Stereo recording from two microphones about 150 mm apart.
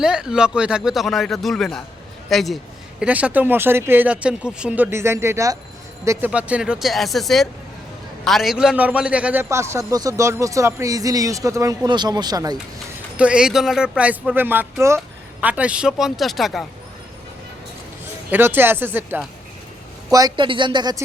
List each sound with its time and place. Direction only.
0.0 s a man's voice: 5° right (ahead or behind); by 12.5 s 25° right (ahead or behind)
13.1 s speech: 5° right (ahead or behind)
18.3 s speech: 15° right (ahead or behind)
20.1 s speech: 25° right (ahead or behind)